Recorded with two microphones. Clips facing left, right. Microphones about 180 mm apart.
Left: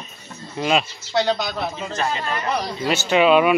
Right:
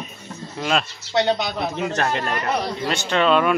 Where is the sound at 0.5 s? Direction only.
5° left (ahead or behind).